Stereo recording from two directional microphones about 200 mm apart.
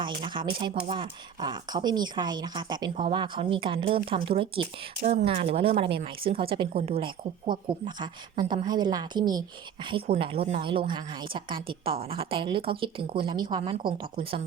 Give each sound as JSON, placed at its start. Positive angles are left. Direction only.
{"t": 0.0, "sound": "speech", "side_deg": -25}